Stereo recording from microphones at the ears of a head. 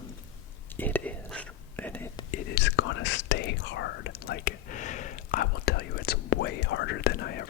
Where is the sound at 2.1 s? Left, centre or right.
Left.